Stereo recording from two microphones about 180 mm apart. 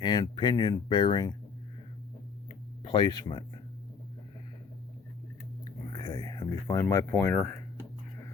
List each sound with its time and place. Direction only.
0.0 s speech: 25° left (ahead or behind)
2.5 s a sound: 25° left (ahead or behind)
5.9 s speech: 20° left (ahead or behind)